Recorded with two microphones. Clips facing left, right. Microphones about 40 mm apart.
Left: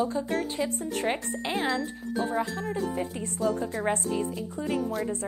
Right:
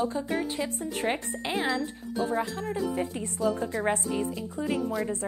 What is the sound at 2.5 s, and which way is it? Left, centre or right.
Speech, right.